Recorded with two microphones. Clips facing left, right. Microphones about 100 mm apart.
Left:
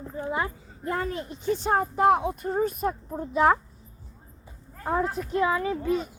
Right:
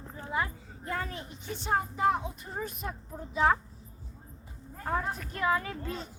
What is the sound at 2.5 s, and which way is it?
Speech, 45° left (ahead or behind).